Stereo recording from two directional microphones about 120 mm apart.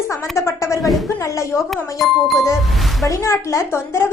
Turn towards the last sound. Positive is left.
turn(degrees=20)  # may be behind; listen again after turning